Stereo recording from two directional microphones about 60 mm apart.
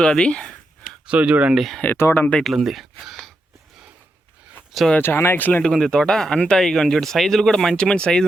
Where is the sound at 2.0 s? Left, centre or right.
Left.